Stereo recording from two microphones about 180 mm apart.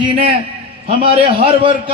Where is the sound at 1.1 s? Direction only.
30° right (ahead or behind).